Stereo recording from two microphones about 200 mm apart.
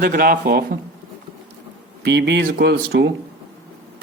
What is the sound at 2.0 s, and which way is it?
Speech, 60° right (ahead or behind).